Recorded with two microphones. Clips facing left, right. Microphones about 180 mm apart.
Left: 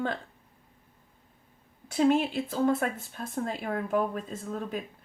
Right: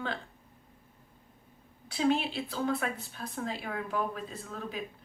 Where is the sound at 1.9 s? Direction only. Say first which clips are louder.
Left 4 dB; 45° left (ahead or behind).